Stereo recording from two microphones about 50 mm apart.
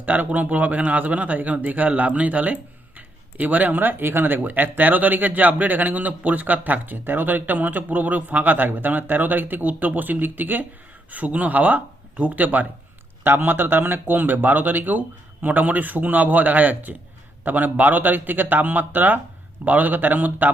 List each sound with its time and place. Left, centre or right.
0.0 s a man's voice: right
13.2 s a man's voice: right